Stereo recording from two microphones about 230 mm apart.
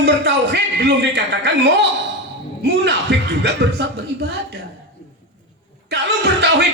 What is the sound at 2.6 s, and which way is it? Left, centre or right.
Speech, right.